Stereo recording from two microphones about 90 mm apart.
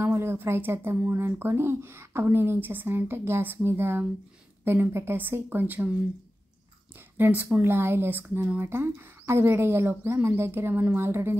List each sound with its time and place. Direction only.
0.0 s speech: 25° right (ahead or behind)
7.0 s speech: 20° right (ahead or behind)